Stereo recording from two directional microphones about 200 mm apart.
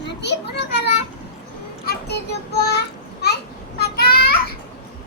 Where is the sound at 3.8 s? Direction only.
50° left (ahead or behind).